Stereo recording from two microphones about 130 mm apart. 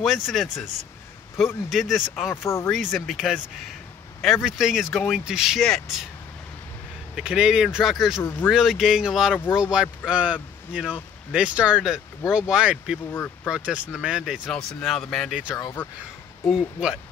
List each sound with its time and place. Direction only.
0.0 s speech: centre (ahead or behind)
1.7 s speech: centre (ahead or behind)
2.3 s speech: 20° left (ahead or behind)
2.7 s speech: centre (ahead or behind)
7.2 s speech: 5° right (ahead or behind)
8.2 s speech: 20° left (ahead or behind)
8.5 s speech: 5° right (ahead or behind)
13.1 s speech: 15° left (ahead or behind)
13.5 s speech: 5° right (ahead or behind)
15.8 s speech: 15° left (ahead or behind)
16.4 s speech: 5° right (ahead or behind)